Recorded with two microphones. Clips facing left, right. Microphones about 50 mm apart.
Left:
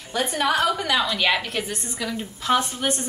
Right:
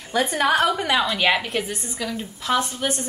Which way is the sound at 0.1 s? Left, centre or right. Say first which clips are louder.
Right 3 dB; right.